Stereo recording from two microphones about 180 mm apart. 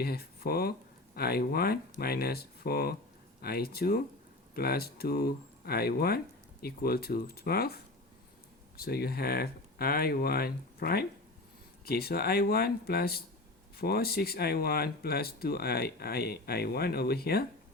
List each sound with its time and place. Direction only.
0.0 s speech: 60° left (ahead or behind)